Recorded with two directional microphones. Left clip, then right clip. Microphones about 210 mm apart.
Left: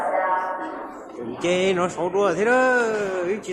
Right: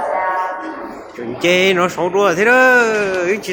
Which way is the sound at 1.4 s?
15° right (ahead or behind).